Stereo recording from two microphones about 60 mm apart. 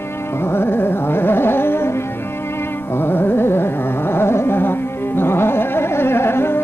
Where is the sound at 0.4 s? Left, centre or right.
Left.